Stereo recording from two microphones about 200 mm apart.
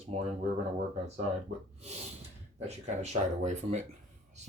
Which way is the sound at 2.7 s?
35° right (ahead or behind).